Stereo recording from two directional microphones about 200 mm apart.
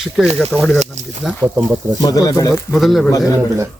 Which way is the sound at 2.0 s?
15° left (ahead or behind).